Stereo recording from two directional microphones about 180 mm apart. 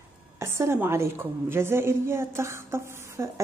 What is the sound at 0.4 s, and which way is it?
A woman's voice, 15° right (ahead or behind).